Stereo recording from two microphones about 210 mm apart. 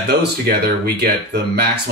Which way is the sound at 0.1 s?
50° right (ahead or behind).